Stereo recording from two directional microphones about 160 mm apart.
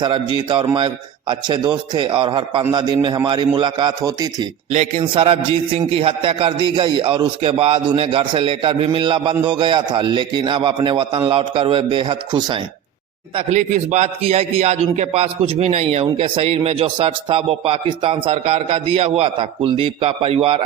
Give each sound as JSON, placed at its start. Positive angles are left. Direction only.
{"t": 0.0, "sound": "a man's voice", "side_deg": -30}
{"t": 4.7, "sound": "a man's voice", "side_deg": -40}
{"t": 13.5, "sound": "a man's voice", "side_deg": -50}